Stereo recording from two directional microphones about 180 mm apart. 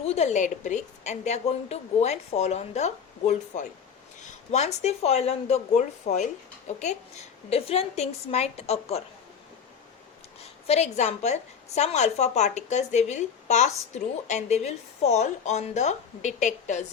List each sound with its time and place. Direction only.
0.0 s a woman's voice: 35° left (ahead or behind)
7.5 s a woman's voice: 35° left (ahead or behind)
10.7 s a woman's voice: 40° left (ahead or behind)